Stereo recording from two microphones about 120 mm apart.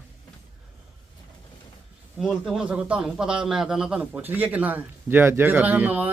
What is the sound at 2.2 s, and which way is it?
A man's voice, 5° right (ahead or behind).